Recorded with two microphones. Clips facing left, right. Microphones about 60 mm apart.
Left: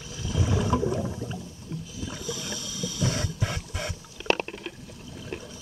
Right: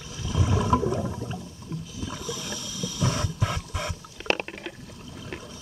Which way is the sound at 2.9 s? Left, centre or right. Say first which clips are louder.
Right 2 dB; centre.